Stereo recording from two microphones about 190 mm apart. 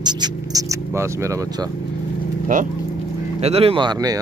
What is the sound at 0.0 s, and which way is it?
Speech, 20° right (ahead or behind).